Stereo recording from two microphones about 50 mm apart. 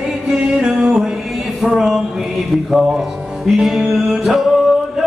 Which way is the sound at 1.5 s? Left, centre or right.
Centre.